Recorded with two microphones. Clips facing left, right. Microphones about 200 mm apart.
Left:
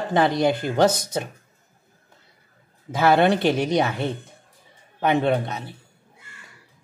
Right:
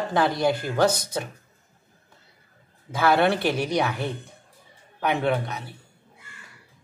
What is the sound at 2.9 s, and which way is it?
A woman's voice, 20° left (ahead or behind).